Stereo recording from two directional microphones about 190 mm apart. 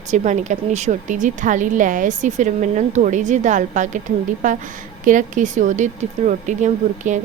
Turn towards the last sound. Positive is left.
turn(degrees=-40)  # may be behind; listen again after turning